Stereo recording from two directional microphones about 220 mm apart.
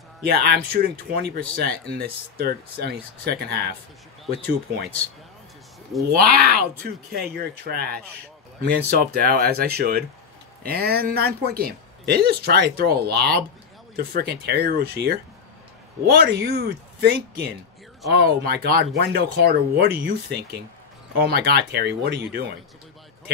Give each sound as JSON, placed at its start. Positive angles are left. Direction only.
{"t": 0.2, "sound": "speech", "side_deg": -45}
{"t": 6.1, "sound": "speech", "side_deg": -45}